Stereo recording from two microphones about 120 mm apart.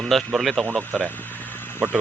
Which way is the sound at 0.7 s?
15° right (ahead or behind).